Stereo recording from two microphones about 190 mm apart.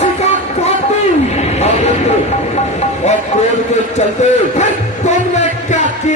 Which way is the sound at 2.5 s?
35° left (ahead or behind).